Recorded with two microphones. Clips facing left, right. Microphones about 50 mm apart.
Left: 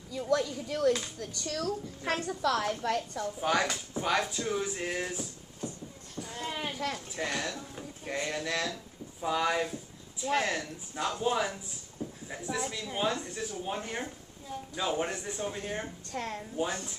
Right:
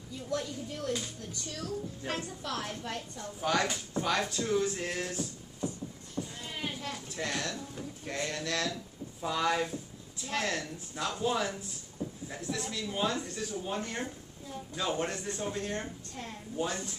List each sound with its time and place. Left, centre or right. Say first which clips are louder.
0.3 s a woman's voice: left 6 dB; left
3.3 s speech: even; centre
6.2 s a sound: left 3 dB; left
7.1 s speech: left 1 dB; centre
16.1 s a woman's voice: left 6 dB; left
16.5 s speech: even; centre